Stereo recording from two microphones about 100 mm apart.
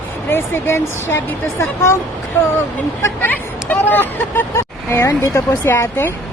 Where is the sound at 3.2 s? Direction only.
15° left (ahead or behind).